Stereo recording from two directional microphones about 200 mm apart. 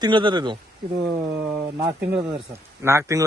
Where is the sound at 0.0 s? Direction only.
25° right (ahead or behind).